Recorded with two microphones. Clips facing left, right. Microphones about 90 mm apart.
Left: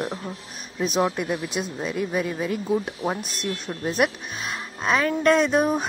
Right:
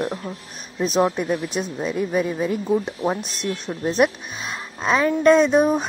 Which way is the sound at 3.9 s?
25° right (ahead or behind).